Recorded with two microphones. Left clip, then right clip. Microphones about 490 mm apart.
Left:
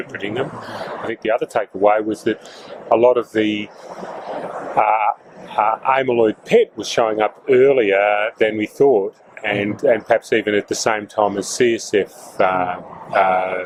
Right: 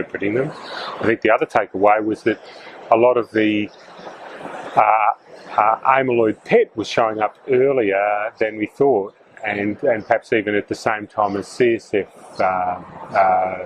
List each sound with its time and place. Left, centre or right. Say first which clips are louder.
1.0 s speech: right 4 dB; right
4.8 s frog: right 1 dB; centre
5.5 s speech: right 1 dB; centre